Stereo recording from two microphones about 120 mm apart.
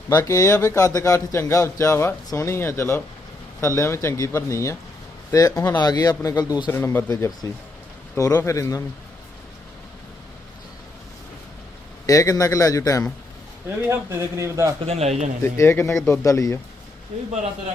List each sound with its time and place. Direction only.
0.1 s a man's voice: 30° left (ahead or behind)
6.7 s a man's voice: 20° left (ahead or behind)
12.0 s a man's voice: 30° left (ahead or behind)
13.8 s a man's voice: 20° right (ahead or behind)
14.8 s a man's voice: 65° right (ahead or behind)
15.5 s a man's voice: 20° left (ahead or behind)